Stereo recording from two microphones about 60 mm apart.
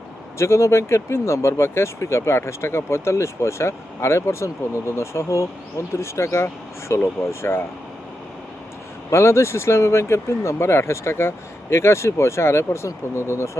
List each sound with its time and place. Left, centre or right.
0.3 s speech: left
9.0 s speech: left